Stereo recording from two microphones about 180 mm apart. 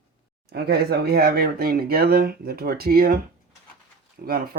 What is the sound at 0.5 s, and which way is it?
Speech, 60° right (ahead or behind).